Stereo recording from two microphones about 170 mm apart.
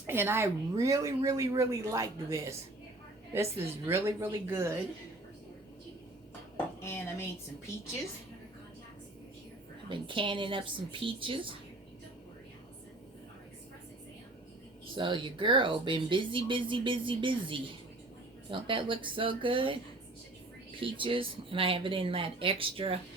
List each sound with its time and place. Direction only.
0.1 s a woman's voice: 15° right (ahead or behind)
6.8 s dishes: 15° left (ahead or behind)
9.9 s speech: 30° right (ahead or behind)
14.9 s speech: 30° right (ahead or behind)
20.8 s speech: 30° right (ahead or behind)